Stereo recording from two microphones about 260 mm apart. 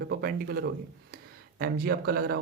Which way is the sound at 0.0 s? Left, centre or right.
Right.